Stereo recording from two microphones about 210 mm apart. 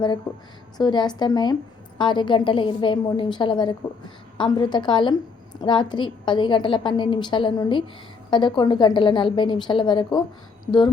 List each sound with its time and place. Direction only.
0.3 s a woman's voice: 15° left (ahead or behind)